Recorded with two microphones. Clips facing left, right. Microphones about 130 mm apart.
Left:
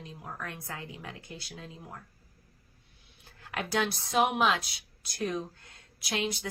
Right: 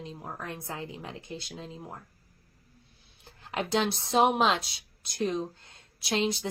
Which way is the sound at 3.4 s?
25° right (ahead or behind).